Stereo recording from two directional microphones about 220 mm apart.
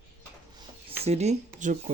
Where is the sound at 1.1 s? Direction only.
30° right (ahead or behind).